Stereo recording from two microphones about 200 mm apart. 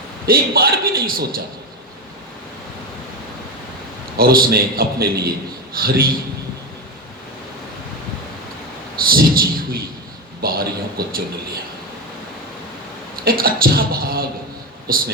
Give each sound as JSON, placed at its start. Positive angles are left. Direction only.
{"t": 0.3, "sound": "a man's voice", "side_deg": -50}
{"t": 4.2, "sound": "a man's voice", "side_deg": -45}
{"t": 9.0, "sound": "a man's voice", "side_deg": -45}
{"t": 13.2, "sound": "a man's voice", "side_deg": -50}